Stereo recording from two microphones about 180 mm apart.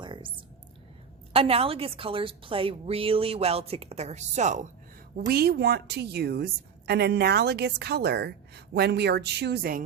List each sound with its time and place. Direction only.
0.0 s whispering: 25° right (ahead or behind)
1.3 s a woman's voice: 35° right (ahead or behind)
5.1 s a woman's voice: 55° right (ahead or behind)